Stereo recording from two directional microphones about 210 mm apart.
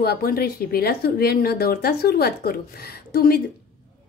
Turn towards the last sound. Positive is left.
turn(degrees=45)  # may be behind; listen again after turning